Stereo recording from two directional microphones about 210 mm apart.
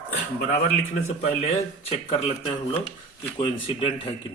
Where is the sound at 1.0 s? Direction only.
30° left (ahead or behind).